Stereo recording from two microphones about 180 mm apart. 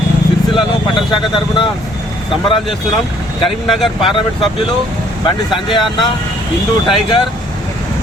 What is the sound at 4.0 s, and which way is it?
Speech, 30° left (ahead or behind).